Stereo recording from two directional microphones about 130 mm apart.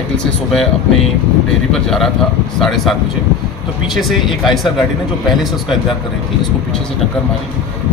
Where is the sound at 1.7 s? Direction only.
5° left (ahead or behind).